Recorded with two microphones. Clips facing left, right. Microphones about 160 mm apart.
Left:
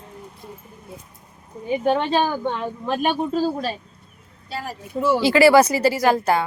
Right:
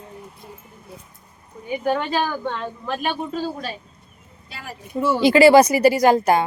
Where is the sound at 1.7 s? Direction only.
25° left (ahead or behind).